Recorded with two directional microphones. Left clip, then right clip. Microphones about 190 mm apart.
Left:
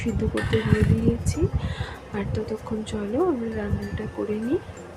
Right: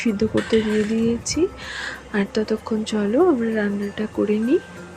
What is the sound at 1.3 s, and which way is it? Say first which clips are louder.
Speech: right 6 dB; 30° right (ahead or behind).